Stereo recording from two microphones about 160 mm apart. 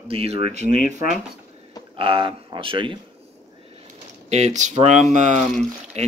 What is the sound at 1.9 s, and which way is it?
Speech, 35° right (ahead or behind).